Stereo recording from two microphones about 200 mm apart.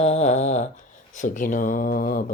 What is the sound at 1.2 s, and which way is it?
Speech, 40° left (ahead or behind).